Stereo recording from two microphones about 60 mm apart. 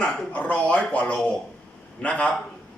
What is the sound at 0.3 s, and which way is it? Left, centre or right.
Speech, left.